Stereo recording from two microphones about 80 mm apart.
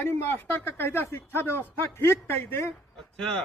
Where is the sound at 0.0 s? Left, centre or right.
Left.